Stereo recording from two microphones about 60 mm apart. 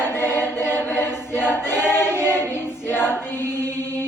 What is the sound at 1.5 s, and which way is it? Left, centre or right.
Choir, left.